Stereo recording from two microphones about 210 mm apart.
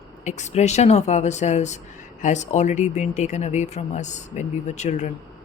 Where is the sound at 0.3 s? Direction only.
35° left (ahead or behind).